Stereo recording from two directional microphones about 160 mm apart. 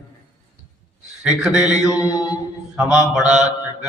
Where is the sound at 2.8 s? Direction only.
5° right (ahead or behind).